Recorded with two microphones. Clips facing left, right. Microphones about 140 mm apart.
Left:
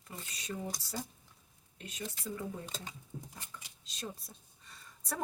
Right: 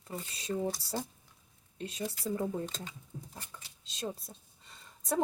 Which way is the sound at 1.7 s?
30° right (ahead or behind).